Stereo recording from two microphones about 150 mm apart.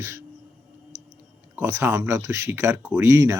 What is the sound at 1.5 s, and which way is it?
Speech, 20° right (ahead or behind).